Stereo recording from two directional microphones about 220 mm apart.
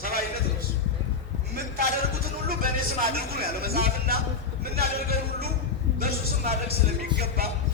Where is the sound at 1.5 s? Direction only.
50° right (ahead or behind).